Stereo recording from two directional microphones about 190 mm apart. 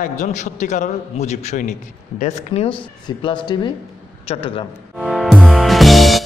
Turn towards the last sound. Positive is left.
turn(degrees=0)  # may be behind; listen again after turning